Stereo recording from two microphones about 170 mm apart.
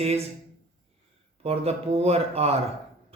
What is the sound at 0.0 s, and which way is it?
Speech, 35° right (ahead or behind).